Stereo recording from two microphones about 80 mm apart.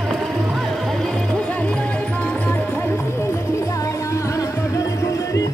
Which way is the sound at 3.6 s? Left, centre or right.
Left.